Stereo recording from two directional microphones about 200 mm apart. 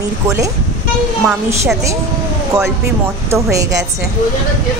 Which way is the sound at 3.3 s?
15° right (ahead or behind).